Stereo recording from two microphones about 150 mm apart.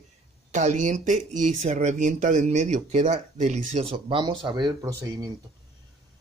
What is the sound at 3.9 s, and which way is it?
Speech, 35° right (ahead or behind).